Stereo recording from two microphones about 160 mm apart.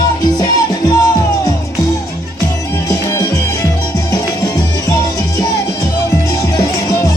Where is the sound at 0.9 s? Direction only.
20° left (ahead or behind).